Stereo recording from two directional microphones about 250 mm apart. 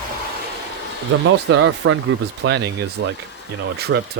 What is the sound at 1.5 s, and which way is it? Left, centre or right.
Speech, right.